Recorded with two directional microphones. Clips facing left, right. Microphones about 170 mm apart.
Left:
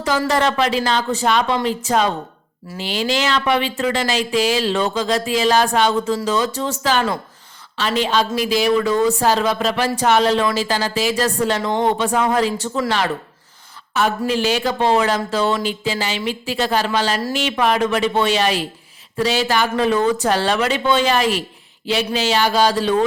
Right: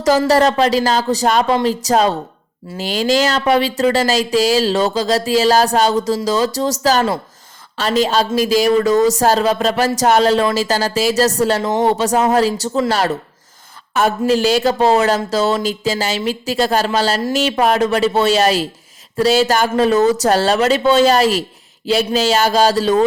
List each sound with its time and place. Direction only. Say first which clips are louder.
0.0 s speech: right 6 dB; 40° right (ahead or behind)
13.9 s speech: right 4 dB; 45° right (ahead or behind)